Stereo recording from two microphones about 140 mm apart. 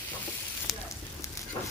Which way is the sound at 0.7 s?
Centre (ahead or behind).